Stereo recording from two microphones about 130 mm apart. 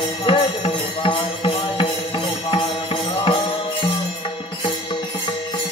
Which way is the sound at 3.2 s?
45° left (ahead or behind).